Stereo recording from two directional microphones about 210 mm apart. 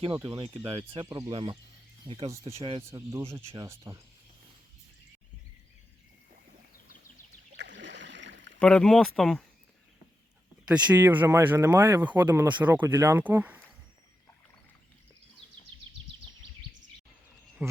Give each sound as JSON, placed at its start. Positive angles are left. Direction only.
{"t": 0.3, "sound": "speech", "side_deg": -25}
{"t": 2.3, "sound": "speech", "side_deg": -15}
{"t": 7.5, "sound": "rowboat", "side_deg": -55}
{"t": 8.5, "sound": "speech", "side_deg": 5}
{"t": 10.7, "sound": "speech", "side_deg": -10}
{"t": 17.6, "sound": "speech", "side_deg": -10}